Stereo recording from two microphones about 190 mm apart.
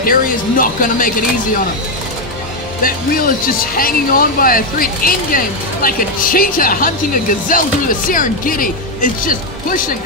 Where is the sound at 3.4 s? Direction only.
50° left (ahead or behind).